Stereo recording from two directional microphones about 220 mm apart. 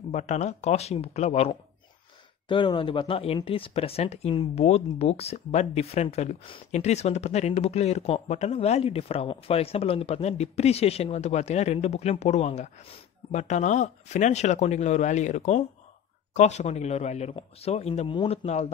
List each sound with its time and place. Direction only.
0.1 s speech: 30° left (ahead or behind)